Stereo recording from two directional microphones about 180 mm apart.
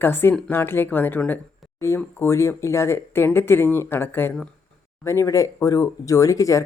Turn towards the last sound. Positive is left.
turn(degrees=15)  # may be behind; listen again after turning